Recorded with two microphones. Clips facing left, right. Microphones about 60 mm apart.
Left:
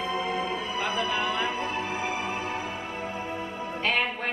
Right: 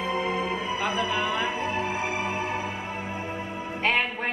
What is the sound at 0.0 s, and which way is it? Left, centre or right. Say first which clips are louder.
Music: right 2 dB; centre.